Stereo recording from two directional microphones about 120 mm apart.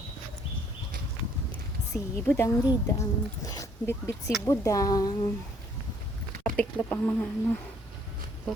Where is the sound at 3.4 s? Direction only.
30° left (ahead or behind).